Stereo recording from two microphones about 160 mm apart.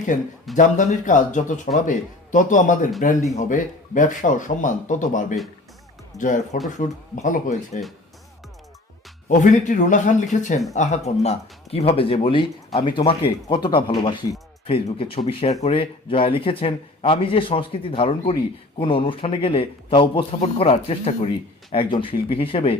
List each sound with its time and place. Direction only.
0.1 s a man's voice: 55° left (ahead or behind)
9.3 s a man's voice: 50° left (ahead or behind); by 22.8 s 35° left (ahead or behind)